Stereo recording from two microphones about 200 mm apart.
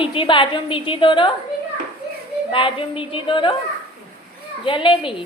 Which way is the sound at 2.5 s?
25° left (ahead or behind).